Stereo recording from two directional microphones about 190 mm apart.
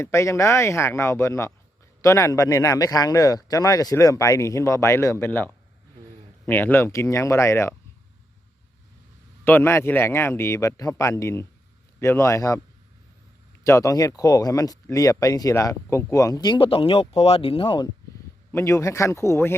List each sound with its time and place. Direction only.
0.0 s speech: 15° left (ahead or behind)
9.4 s speech: 10° left (ahead or behind)
13.7 s speech: 15° left (ahead or behind)
18.5 s speech: 15° left (ahead or behind)